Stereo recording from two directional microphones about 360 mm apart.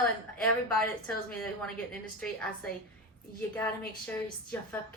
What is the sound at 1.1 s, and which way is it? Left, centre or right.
A woman's voice, centre.